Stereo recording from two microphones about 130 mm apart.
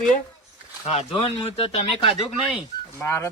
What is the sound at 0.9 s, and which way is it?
Speech, 50° left (ahead or behind).